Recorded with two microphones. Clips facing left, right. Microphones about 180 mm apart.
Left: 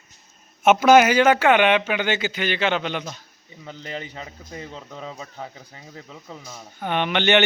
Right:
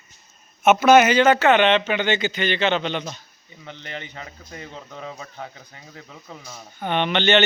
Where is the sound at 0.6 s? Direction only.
10° left (ahead or behind).